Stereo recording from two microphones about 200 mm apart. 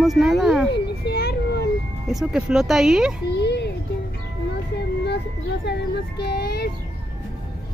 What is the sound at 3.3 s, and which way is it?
Music, 55° left (ahead or behind).